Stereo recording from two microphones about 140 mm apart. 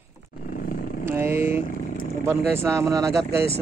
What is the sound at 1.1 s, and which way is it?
Speech, 15° right (ahead or behind).